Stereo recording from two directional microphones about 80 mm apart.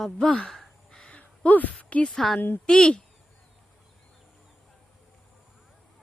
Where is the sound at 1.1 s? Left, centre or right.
Centre.